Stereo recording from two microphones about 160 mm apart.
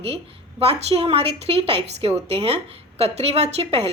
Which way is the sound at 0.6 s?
35° right (ahead or behind).